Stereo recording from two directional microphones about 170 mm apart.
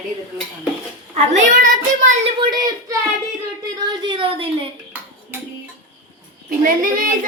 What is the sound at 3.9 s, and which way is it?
Speech, 30° right (ahead or behind).